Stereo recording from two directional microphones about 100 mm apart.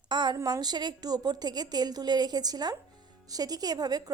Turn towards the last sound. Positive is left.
turn(degrees=-40)  # may be behind; listen again after turning